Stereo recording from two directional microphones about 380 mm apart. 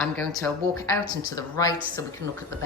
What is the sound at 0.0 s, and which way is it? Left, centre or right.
Speech, centre.